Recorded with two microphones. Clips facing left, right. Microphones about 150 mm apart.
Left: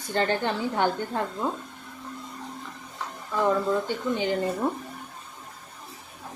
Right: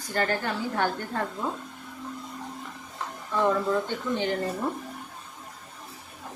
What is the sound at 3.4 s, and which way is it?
Speech, centre (ahead or behind).